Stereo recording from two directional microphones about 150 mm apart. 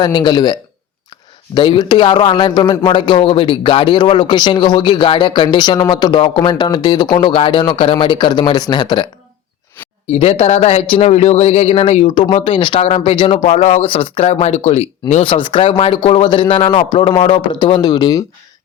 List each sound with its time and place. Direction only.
0.0 s a man's voice: 30° left (ahead or behind)
10.1 s speech: 40° left (ahead or behind)
15.2 s a man's voice: 35° left (ahead or behind)